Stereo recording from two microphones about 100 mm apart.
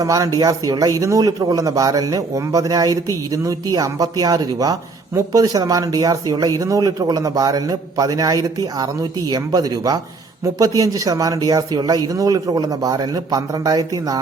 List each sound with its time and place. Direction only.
0.0 s a man's voice: 35° right (ahead or behind)